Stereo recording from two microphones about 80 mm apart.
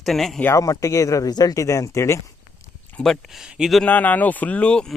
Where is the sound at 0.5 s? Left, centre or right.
Left.